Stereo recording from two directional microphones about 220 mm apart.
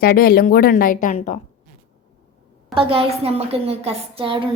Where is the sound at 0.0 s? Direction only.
45° left (ahead or behind).